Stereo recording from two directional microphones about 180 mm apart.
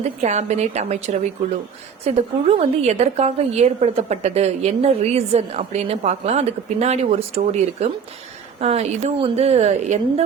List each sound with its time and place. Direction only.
0.0 s a woman's voice: 40° right (ahead or behind)